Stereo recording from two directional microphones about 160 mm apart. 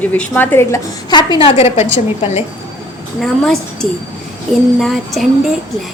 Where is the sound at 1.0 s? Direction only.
25° left (ahead or behind).